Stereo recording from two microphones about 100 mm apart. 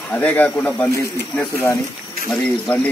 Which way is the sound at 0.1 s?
15° left (ahead or behind).